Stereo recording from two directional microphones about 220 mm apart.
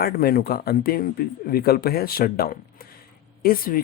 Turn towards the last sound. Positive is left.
turn(degrees=40)  # may be behind; listen again after turning